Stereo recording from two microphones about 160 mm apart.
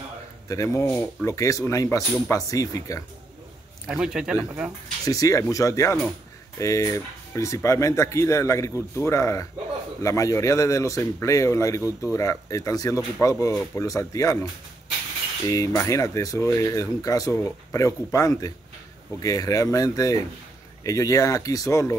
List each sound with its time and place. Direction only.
0.5 s speech: 20° left (ahead or behind)
3.8 s speech: 5° right (ahead or behind)
5.0 s speech: 20° left (ahead or behind)